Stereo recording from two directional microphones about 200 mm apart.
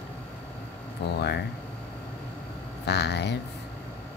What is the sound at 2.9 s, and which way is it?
Speech, 55° left (ahead or behind).